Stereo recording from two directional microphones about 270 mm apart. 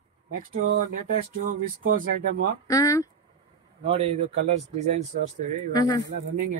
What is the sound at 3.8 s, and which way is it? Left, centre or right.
Speech, right.